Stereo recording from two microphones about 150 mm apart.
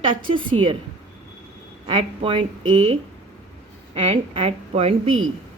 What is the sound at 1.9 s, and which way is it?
Speech, 35° right (ahead or behind).